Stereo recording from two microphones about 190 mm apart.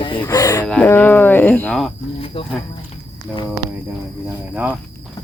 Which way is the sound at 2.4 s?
30° left (ahead or behind).